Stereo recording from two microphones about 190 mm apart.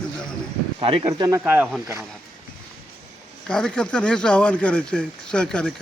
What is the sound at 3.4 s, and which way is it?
Speech, 5° left (ahead or behind).